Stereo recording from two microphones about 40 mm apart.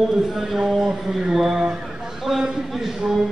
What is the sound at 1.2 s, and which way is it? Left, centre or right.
A man's voice, centre.